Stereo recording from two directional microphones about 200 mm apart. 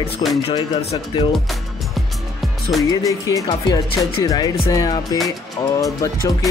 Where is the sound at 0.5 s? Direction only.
30° left (ahead or behind).